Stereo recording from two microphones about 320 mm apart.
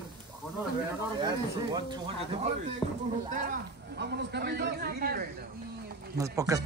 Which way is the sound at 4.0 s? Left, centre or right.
Right.